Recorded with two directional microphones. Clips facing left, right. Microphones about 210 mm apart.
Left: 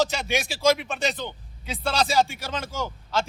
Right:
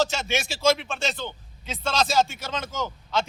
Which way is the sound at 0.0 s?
15° left (ahead or behind).